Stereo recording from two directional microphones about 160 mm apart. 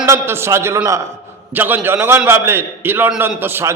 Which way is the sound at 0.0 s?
15° right (ahead or behind).